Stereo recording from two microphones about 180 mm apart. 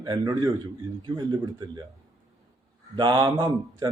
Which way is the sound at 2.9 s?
25° right (ahead or behind).